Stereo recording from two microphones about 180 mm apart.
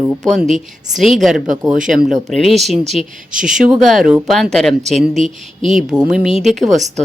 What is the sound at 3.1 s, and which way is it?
Speech, 50° right (ahead or behind).